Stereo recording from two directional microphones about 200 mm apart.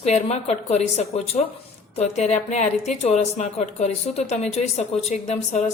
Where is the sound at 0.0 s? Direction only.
35° left (ahead or behind).